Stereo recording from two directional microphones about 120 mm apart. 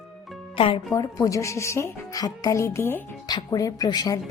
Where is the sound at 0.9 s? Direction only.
25° left (ahead or behind).